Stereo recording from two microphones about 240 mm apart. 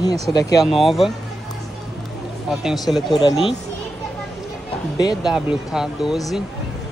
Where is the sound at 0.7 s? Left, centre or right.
Centre.